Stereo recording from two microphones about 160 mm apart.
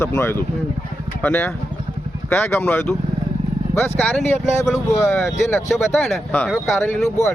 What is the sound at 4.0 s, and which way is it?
A man's voice, 10° left (ahead or behind).